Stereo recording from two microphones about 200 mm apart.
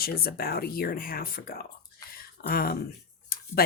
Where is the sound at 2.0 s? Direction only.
50° left (ahead or behind).